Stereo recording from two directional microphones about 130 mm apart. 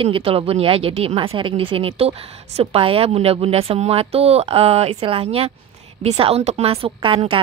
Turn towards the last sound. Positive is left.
turn(degrees=-40)  # may be behind; listen again after turning